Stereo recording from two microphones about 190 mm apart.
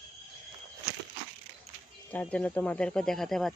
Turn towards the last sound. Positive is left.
turn(degrees=0)  # may be behind; listen again after turning